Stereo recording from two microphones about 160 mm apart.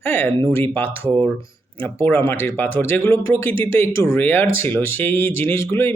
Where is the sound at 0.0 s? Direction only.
15° left (ahead or behind).